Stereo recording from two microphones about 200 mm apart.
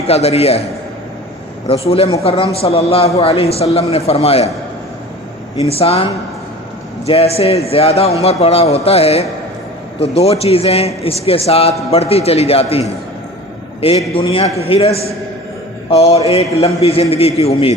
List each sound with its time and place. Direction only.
0.1 s a man's voice: 30° left (ahead or behind)
1.6 s a man's voice: 30° left (ahead or behind)
5.6 s a man's voice: 30° left (ahead or behind)
7.1 s a man's voice: 30° left (ahead or behind)
14.1 s a man's voice: 25° left (ahead or behind)